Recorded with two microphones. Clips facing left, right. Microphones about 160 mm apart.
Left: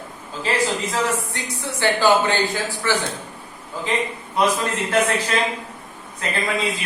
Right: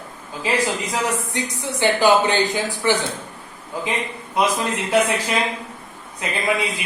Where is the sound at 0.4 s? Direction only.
15° right (ahead or behind).